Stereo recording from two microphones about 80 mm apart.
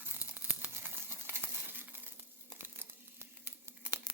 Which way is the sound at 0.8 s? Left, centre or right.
Right.